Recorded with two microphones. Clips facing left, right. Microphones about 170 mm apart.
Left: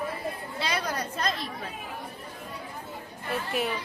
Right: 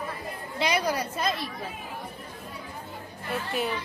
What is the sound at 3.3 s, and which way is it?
Speech, centre (ahead or behind).